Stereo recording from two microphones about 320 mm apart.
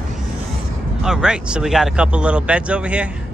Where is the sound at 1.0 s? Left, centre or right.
Centre.